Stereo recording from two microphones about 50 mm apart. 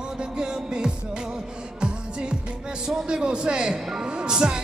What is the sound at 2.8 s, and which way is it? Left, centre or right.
Speech, centre.